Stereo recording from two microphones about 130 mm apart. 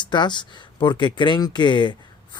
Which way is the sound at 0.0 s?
35° left (ahead or behind).